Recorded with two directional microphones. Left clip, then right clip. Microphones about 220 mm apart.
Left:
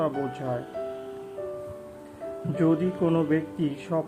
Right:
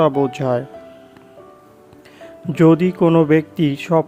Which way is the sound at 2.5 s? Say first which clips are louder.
Right 11 dB; 40° right (ahead or behind).